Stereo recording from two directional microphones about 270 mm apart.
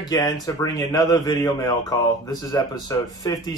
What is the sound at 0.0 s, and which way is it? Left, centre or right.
Speech, centre.